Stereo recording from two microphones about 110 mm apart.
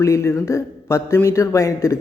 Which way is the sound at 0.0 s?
25° left (ahead or behind).